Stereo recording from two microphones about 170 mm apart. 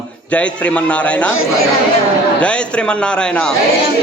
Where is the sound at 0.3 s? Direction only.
5° left (ahead or behind).